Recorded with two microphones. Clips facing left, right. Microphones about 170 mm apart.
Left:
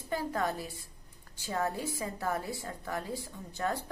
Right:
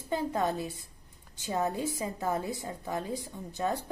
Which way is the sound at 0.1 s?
20° right (ahead or behind).